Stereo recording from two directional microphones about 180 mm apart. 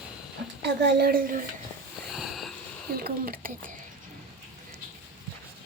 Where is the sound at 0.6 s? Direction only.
70° right (ahead or behind); by 1.4 s 50° right (ahead or behind).